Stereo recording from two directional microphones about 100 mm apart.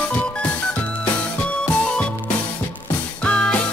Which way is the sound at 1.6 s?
10° left (ahead or behind).